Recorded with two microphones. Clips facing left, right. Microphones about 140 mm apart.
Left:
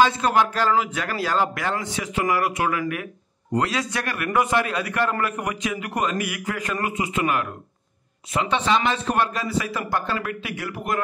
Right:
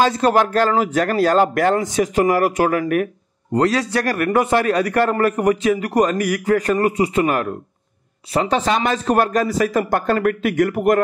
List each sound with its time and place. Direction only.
0.0 s a man's voice: 40° right (ahead or behind)
3.5 s a man's voice: 35° right (ahead or behind)